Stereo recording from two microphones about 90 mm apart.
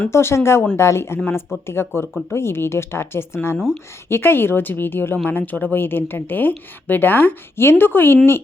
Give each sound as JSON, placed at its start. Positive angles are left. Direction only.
{"t": 0.1, "sound": "a woman's voice", "side_deg": 30}